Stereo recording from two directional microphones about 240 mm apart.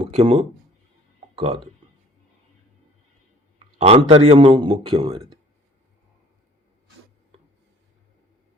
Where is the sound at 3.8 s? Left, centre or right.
Right.